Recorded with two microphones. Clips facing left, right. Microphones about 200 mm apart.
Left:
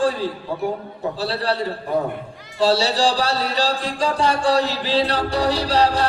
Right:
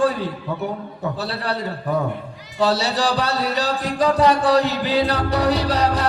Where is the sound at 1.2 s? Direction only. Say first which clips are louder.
Left 6 dB; 30° left (ahead or behind).